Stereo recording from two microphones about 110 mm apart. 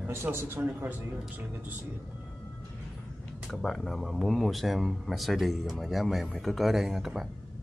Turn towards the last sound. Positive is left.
turn(degrees=-5)  # may be behind; listen again after turning